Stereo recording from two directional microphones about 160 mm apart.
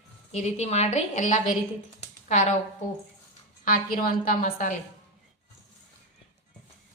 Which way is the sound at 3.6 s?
60° left (ahead or behind).